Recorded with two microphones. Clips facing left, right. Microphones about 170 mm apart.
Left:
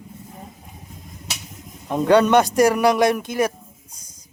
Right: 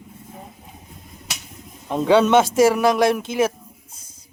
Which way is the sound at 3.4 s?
5° right (ahead or behind).